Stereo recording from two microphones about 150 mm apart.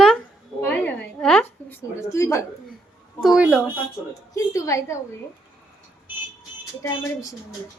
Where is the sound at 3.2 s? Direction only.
5° right (ahead or behind).